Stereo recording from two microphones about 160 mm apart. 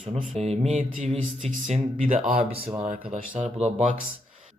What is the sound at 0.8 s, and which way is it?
Speech, 55° right (ahead or behind).